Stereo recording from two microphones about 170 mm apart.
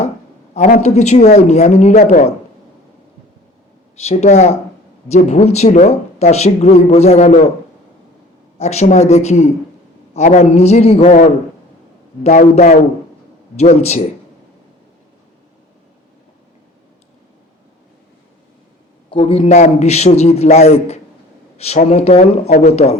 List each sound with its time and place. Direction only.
0.5 s speech: 45° left (ahead or behind)
4.0 s speech: 40° left (ahead or behind)
8.5 s a man's voice: 40° left (ahead or behind)
19.1 s speech: 30° left (ahead or behind)